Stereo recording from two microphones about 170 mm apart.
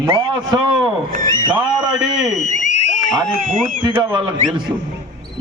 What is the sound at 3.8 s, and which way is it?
Speech, 25° right (ahead or behind).